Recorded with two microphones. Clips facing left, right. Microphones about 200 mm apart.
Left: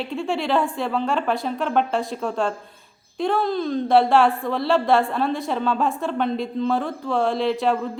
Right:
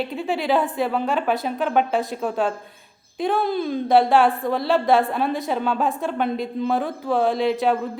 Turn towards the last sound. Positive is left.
turn(degrees=0)  # may be behind; listen again after turning